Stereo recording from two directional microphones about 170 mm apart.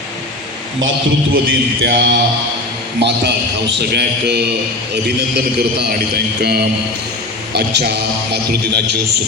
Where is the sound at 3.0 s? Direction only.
85° right.